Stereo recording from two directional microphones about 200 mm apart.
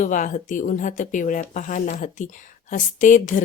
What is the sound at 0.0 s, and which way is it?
A woman's voice, 40° left (ahead or behind).